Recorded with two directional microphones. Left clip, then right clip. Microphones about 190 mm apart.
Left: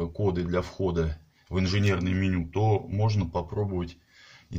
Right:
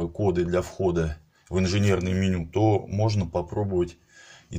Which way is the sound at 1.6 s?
25° right (ahead or behind).